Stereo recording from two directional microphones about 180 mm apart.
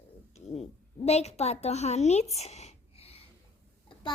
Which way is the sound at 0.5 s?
35° left (ahead or behind).